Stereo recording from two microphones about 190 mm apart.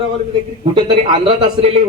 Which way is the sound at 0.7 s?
30° right (ahead or behind).